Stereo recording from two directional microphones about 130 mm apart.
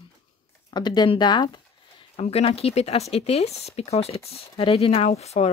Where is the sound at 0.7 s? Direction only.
35° left (ahead or behind).